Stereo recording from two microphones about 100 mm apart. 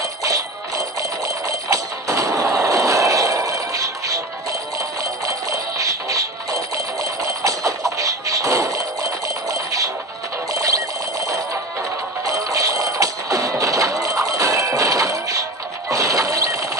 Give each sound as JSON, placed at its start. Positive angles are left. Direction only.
{"t": 0.0, "sound": "music", "side_deg": -35}
{"t": 10.5, "sound": "alarm clock", "side_deg": -35}
{"t": 12.3, "sound": "music", "side_deg": -35}
{"t": 15.9, "sound": "a sound", "side_deg": -35}